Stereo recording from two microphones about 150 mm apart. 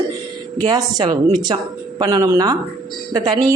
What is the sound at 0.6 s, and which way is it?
Speech, 25° right (ahead or behind).